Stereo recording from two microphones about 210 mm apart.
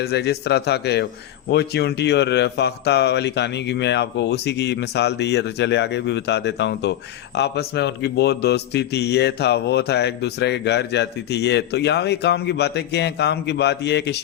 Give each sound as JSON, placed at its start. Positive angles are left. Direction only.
{"t": 0.0, "sound": "a man's voice", "side_deg": 50}